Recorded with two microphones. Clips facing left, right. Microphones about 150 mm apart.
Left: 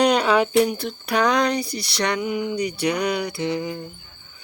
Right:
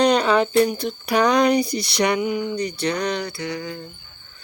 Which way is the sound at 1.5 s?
15° right (ahead or behind).